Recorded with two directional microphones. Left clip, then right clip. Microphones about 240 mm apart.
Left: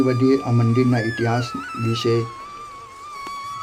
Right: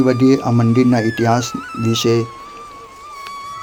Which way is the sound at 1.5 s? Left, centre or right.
Centre.